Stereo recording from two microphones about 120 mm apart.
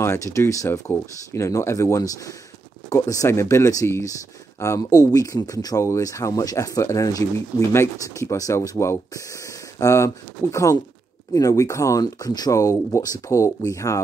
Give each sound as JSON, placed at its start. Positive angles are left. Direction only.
{"t": 0.0, "sound": "speech", "side_deg": 25}